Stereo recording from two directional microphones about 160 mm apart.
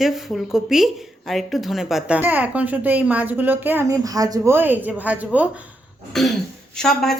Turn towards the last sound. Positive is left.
turn(degrees=5)  # may be behind; listen again after turning